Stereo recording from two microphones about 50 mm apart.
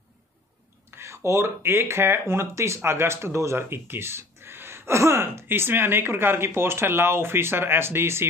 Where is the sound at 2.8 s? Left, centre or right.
Right.